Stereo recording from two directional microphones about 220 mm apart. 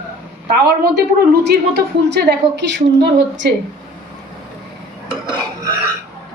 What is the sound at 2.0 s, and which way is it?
A woman's voice, 50° right (ahead or behind).